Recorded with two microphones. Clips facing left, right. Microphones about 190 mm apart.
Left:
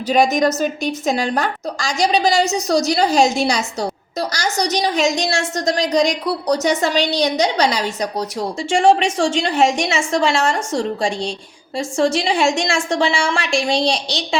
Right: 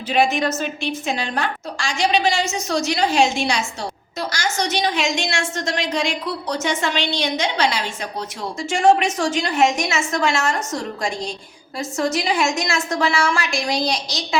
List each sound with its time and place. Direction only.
0.1 s a woman's voice: 40° left (ahead or behind)